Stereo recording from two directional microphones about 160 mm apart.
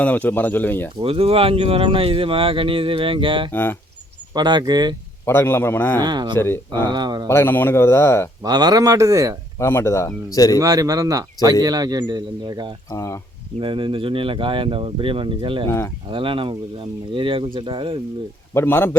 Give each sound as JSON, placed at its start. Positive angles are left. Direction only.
{"t": 0.0, "sound": "speech", "side_deg": 10}
{"t": 1.0, "sound": "speech", "side_deg": -35}
{"t": 3.5, "sound": "speech", "side_deg": 15}
{"t": 4.4, "sound": "speech", "side_deg": -25}
{"t": 5.2, "sound": "speech", "side_deg": 15}
{"t": 6.0, "sound": "speech", "side_deg": -25}
{"t": 7.3, "sound": "speech", "side_deg": 15}
{"t": 8.4, "sound": "speech", "side_deg": -25}
{"t": 9.6, "sound": "speech", "side_deg": 15}
{"t": 10.6, "sound": "speech", "side_deg": -20}
{"t": 12.9, "sound": "speech", "side_deg": 20}
{"t": 13.6, "sound": "speech", "side_deg": -30}
{"t": 18.5, "sound": "speech", "side_deg": 15}